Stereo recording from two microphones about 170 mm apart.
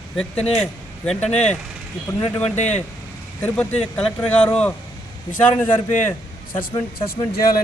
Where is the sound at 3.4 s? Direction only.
5° left (ahead or behind).